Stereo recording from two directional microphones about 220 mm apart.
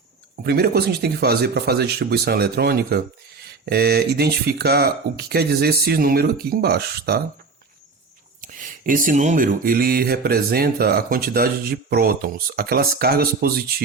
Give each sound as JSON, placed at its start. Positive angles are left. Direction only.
{"t": 0.4, "sound": "speech", "side_deg": -45}
{"t": 8.4, "sound": "speech", "side_deg": -35}